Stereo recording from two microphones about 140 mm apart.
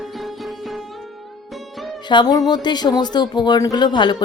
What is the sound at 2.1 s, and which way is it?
Speech, 30° left (ahead or behind).